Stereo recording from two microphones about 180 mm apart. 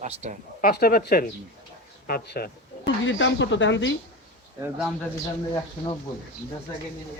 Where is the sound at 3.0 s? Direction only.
90° left.